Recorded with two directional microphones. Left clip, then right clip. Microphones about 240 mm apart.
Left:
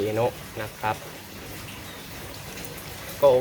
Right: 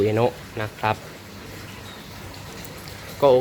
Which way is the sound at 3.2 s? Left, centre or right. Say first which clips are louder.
Right 2 dB; right.